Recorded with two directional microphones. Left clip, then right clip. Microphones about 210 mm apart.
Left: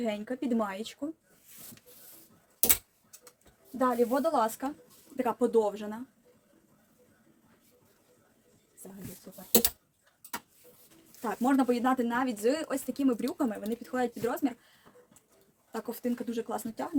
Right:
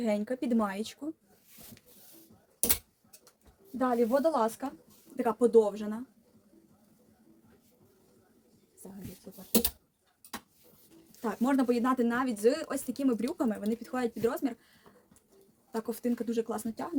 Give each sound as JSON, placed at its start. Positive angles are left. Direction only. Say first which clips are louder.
{"t": 0.0, "sound": "a woman's voice", "louder": "right 2 dB", "side_deg": -25}
{"t": 3.8, "sound": "speech", "louder": "even", "side_deg": 0}
{"t": 4.2, "sound": "speech", "louder": "even", "side_deg": -10}
{"t": 9.5, "sound": "a sound", "louder": "left 3 dB", "side_deg": 10}
{"t": 11.2, "sound": "speech", "louder": "left 2 dB", "side_deg": -10}
{"t": 15.7, "sound": "speech", "louder": "right 1 dB", "side_deg": -10}